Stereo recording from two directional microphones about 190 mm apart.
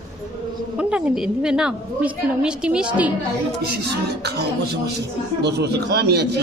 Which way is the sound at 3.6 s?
55° right (ahead or behind).